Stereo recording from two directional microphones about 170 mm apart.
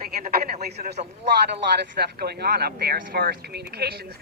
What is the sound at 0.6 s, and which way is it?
Speech, 75° right (ahead or behind).